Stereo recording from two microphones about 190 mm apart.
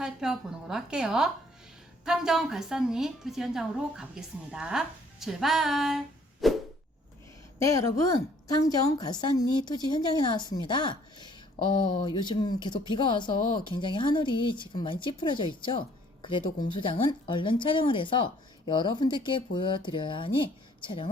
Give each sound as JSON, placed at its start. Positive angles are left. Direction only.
{"t": 0.0, "sound": "a woman's voice", "side_deg": -5}
{"t": 7.6, "sound": "a woman's voice", "side_deg": 15}